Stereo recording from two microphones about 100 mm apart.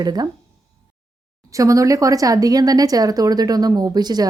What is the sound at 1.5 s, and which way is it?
Speech, 35° right (ahead or behind).